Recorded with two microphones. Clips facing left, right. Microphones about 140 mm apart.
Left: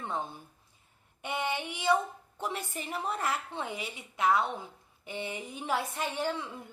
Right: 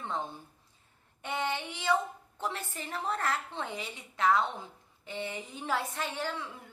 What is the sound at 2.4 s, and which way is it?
A woman's voice, 15° left (ahead or behind).